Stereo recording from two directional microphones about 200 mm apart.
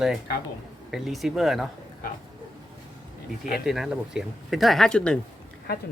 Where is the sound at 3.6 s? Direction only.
Centre (ahead or behind).